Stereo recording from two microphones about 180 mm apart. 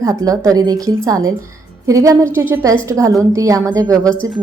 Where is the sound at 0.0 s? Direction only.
20° right (ahead or behind).